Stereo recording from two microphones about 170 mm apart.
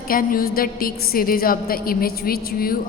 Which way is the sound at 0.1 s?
55° left (ahead or behind).